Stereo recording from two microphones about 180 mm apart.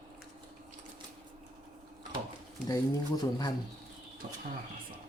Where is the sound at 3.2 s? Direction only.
20° left (ahead or behind).